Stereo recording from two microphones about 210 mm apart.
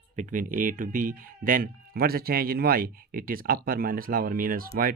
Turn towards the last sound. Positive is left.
turn(degrees=-45)  # may be behind; listen again after turning